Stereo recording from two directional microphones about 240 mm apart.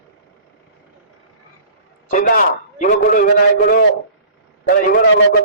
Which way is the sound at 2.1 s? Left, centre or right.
Left.